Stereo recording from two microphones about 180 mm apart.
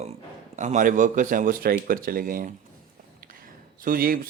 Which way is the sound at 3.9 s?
55° right (ahead or behind).